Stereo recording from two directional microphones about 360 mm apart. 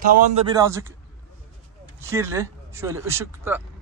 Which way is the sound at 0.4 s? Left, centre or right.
Centre.